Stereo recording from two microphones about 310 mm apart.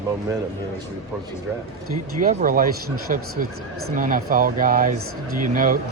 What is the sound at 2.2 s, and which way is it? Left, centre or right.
Speech, right.